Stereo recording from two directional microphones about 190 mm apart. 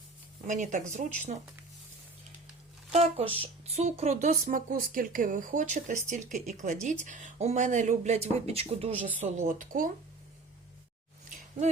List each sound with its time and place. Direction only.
0.4 s a woman's voice: 40° right (ahead or behind)
2.9 s a woman's voice: 30° right (ahead or behind)